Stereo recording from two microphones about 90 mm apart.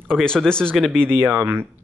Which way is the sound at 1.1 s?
20° right (ahead or behind).